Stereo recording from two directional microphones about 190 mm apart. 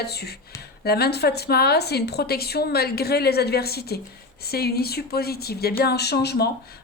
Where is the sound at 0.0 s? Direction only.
55° left (ahead or behind).